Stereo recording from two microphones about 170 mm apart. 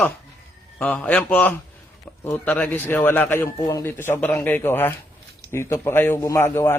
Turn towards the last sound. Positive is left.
turn(degrees=15)  # may be behind; listen again after turning